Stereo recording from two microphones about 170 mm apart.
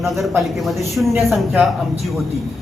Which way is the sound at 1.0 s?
15° right (ahead or behind).